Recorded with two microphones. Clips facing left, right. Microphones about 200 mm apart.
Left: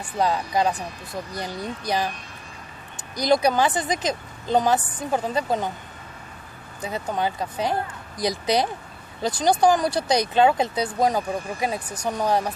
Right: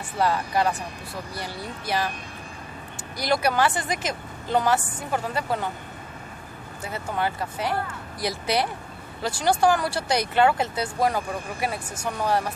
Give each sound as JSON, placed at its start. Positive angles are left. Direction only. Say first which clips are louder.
{"t": 0.2, "sound": "a woman's voice", "louder": "left 1 dB", "side_deg": 15}
{"t": 3.2, "sound": "a woman's voice", "louder": "left 3 dB", "side_deg": 20}
{"t": 6.8, "sound": "a woman's voice", "louder": "left 2 dB", "side_deg": 15}